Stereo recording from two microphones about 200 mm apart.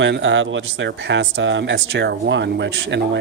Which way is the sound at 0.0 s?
65° right (ahead or behind).